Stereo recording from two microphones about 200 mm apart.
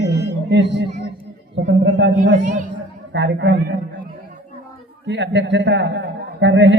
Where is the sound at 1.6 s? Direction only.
60° right (ahead or behind).